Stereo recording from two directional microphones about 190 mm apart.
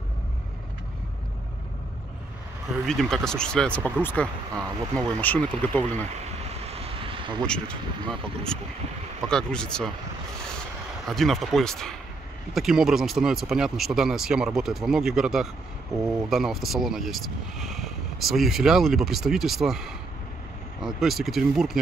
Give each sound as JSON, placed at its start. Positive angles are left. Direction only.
{"t": 2.9, "sound": "speech", "side_deg": 0}
{"t": 6.5, "sound": "vehicle", "side_deg": -30}
{"t": 7.4, "sound": "speech", "side_deg": 5}
{"t": 11.1, "sound": "speech", "side_deg": 0}